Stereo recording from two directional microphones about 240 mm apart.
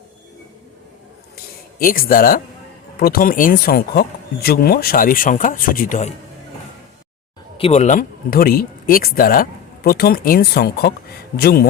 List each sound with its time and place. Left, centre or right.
1.8 s speech: left
7.5 s speech: left